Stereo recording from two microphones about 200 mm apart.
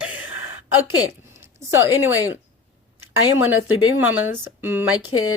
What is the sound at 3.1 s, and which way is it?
Speech, 85° left.